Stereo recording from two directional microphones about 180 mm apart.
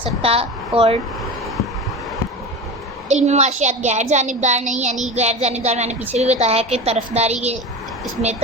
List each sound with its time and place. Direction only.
0.0 s a woman's voice: 30° right (ahead or behind)
3.1 s a child's voice: 40° right (ahead or behind)